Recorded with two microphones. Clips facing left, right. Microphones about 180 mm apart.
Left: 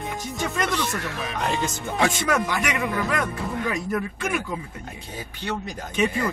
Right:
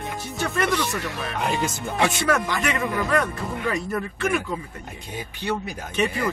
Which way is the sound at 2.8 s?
Centre (ahead or behind).